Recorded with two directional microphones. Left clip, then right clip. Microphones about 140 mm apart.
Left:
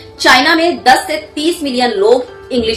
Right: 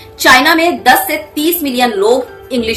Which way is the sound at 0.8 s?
25° right (ahead or behind).